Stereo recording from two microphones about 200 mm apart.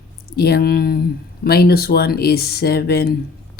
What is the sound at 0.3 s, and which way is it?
Speech, 55° left (ahead or behind).